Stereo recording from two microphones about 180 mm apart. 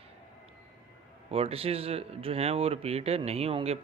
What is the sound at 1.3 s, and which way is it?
Speech, 30° right (ahead or behind).